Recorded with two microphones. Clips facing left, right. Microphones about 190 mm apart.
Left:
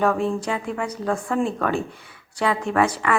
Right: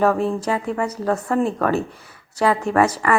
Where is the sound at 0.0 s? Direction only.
5° right (ahead or behind).